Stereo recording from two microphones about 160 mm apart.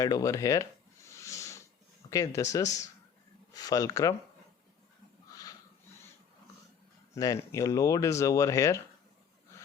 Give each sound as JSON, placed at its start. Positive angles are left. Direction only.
{"t": 0.0, "sound": "a sound", "side_deg": 20}
{"t": 2.0, "sound": "speech", "side_deg": 20}
{"t": 7.1, "sound": "speech", "side_deg": 20}